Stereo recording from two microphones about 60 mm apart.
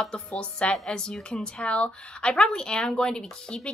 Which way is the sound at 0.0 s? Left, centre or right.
Centre.